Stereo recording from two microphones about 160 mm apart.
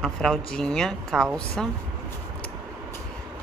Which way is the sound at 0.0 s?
Centre (ahead or behind).